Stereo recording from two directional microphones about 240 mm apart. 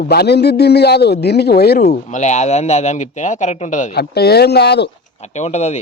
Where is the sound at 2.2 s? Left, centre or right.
Left.